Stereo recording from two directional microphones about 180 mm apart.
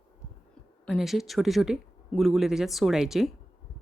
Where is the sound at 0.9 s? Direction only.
Centre (ahead or behind).